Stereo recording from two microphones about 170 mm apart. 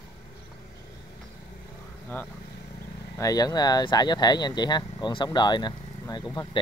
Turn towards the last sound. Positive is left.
turn(degrees=25)  # may be behind; listen again after turning